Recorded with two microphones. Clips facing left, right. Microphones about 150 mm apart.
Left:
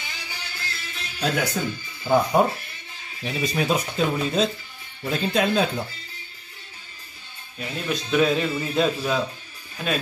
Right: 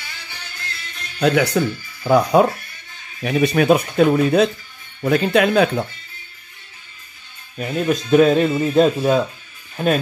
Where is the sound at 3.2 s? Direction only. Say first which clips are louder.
Right 9 dB; 65° right (ahead or behind).